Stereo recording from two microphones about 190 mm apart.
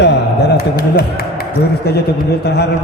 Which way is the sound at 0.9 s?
55° left (ahead or behind).